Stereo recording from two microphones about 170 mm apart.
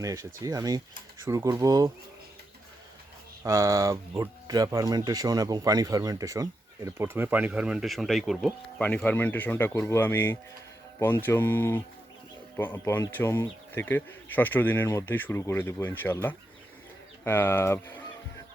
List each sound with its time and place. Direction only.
0.0 s speech: 20° right (ahead or behind)
3.4 s speech: 20° right (ahead or behind); by 18.0 s 15° left (ahead or behind)